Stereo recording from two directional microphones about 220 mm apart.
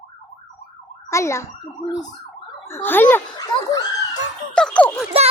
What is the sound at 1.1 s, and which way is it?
Siren, 15° left (ahead or behind).